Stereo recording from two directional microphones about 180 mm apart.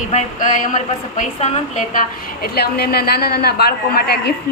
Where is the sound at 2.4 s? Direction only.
60° left (ahead or behind).